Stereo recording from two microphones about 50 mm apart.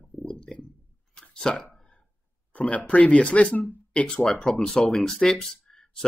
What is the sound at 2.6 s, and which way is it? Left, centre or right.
Speech, left.